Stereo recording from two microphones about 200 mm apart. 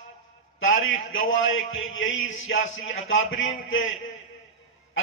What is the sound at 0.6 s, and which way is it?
A man's voice, 80° left.